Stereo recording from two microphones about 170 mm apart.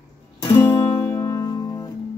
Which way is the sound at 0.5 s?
15° left (ahead or behind).